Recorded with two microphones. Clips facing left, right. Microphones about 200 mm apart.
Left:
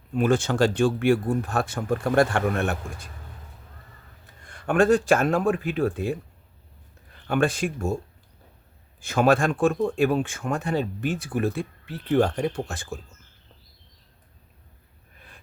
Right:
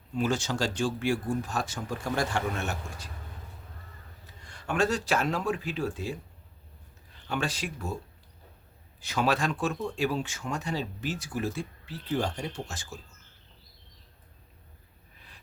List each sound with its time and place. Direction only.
0.1 s speech: 55° left (ahead or behind)
4.4 s speech: 55° left (ahead or behind)
7.3 s speech: 55° left (ahead or behind)
9.0 s speech: 50° left (ahead or behind)